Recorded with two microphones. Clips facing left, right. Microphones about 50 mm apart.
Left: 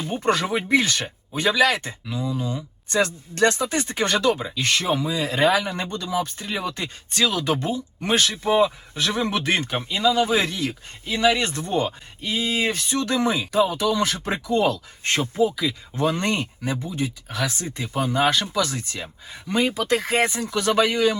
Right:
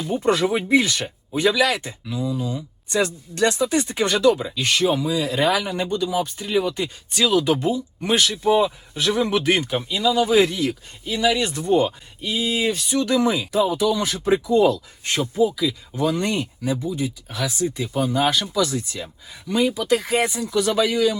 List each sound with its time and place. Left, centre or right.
0.0 s speech: left
6.0 s speech: centre
6.7 s speech: left